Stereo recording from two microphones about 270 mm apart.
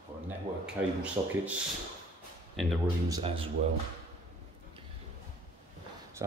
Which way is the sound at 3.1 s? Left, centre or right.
Centre.